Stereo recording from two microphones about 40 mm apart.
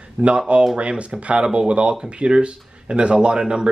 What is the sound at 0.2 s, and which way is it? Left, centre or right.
Speech, right.